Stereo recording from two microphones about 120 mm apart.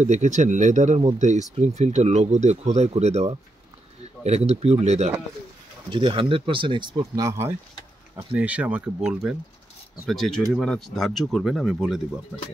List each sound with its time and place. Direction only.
0.0 s speech: 90° right; by 5.1 s 65° right (ahead or behind)
5.9 s speech: 45° right (ahead or behind); by 7.5 s 25° right (ahead or behind)
8.4 s speech: 10° right (ahead or behind)